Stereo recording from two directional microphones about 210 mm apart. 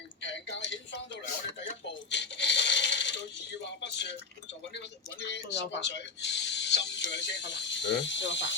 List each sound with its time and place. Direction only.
0.2 s a sound: 60° left (ahead or behind)
2.0 s coin: 55° left (ahead or behind)
3.6 s speech: 55° left (ahead or behind)
5.2 s speech: 55° left (ahead or behind)